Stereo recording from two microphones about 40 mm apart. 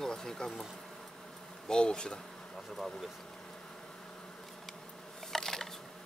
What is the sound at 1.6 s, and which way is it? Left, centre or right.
Speech, centre.